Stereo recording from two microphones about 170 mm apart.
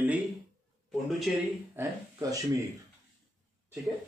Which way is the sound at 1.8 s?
20° right (ahead or behind).